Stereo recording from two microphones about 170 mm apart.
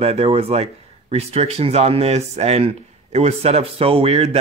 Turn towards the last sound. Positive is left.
turn(degrees=-40)  # may be behind; listen again after turning